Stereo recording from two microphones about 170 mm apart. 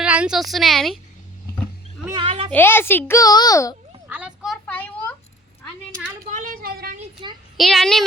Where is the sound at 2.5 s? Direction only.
10° left (ahead or behind).